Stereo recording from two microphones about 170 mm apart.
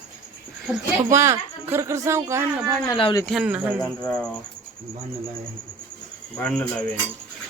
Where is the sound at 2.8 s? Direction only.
25° left (ahead or behind).